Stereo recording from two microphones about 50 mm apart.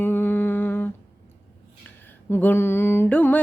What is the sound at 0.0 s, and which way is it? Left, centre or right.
Humming, left.